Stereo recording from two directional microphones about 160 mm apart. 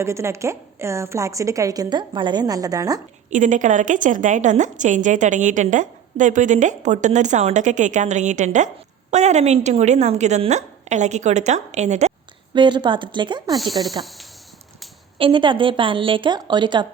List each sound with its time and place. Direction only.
0.0 s a woman's voice: 15° right (ahead or behind)
3.2 s a woman's voice: 50° right (ahead or behind)
12.5 s a woman's voice: 30° right (ahead or behind)
15.2 s a woman's voice: 30° right (ahead or behind)